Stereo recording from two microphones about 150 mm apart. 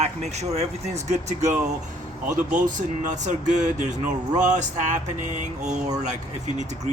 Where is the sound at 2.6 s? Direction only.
60° right (ahead or behind).